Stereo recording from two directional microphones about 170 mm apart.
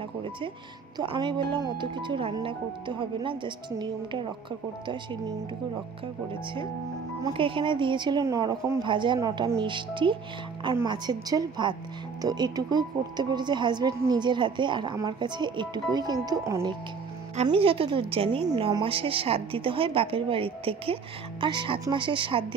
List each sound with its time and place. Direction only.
0.9 s a woman's voice: 30° right (ahead or behind)
7.2 s a woman's voice: 30° right (ahead or behind)
17.4 s a woman's voice: 35° right (ahead or behind)